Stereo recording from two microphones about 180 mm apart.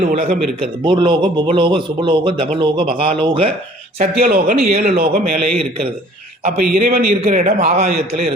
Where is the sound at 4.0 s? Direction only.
40° right (ahead or behind).